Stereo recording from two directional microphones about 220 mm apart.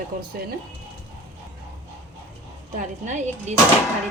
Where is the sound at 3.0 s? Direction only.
35° right (ahead or behind).